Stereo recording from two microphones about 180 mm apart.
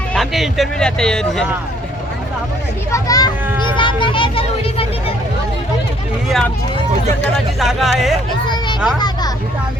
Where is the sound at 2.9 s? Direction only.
20° left (ahead or behind).